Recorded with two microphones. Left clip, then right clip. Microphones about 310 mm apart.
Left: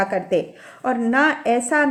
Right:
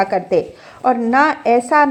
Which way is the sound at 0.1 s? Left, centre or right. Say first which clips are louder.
Right 4 dB; centre.